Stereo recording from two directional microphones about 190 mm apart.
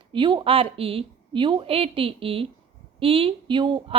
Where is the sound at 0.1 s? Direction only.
25° right (ahead or behind).